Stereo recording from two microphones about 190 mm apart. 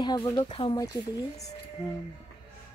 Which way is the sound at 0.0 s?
20° left (ahead or behind).